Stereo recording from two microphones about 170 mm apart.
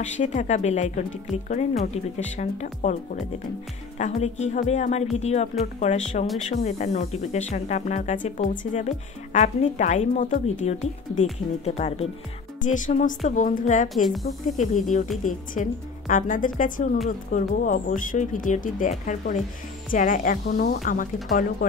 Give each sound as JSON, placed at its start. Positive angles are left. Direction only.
{"t": 0.0, "sound": "speech", "side_deg": 45}
{"t": 4.0, "sound": "a woman's voice", "side_deg": 40}
{"t": 12.6, "sound": "speech", "side_deg": 50}